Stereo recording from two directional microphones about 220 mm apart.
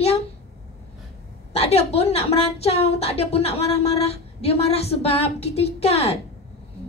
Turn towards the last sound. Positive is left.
turn(degrees=30)  # may be behind; listen again after turning